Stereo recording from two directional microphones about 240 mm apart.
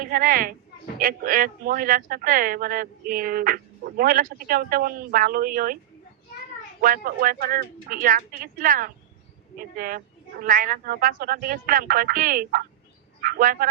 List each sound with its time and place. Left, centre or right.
0.0 s speech: right
6.8 s speech: right